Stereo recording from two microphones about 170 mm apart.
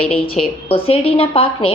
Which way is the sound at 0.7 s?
35° left (ahead or behind).